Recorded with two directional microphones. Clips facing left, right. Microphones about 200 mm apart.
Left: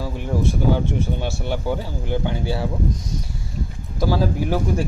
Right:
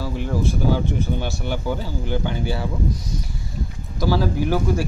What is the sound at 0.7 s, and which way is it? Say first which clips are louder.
Speech: even; 30° left (ahead or behind).